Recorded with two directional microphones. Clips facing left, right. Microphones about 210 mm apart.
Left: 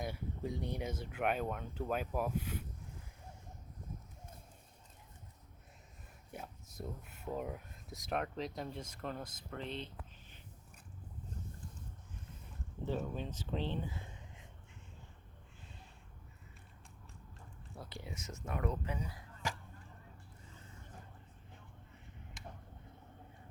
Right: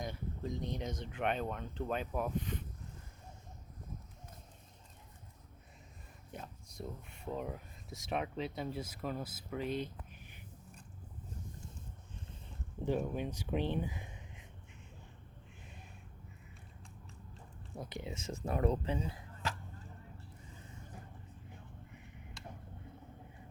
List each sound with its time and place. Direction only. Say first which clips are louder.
0.0 s speech: left 1 dB; 10° left (ahead or behind)
6.3 s speech: even; 5° left (ahead or behind); by 10.4 s 15° right (ahead or behind)
12.8 s speech: right 4 dB; 15° right (ahead or behind)
17.7 s speech: right 5 dB; 20° right (ahead or behind)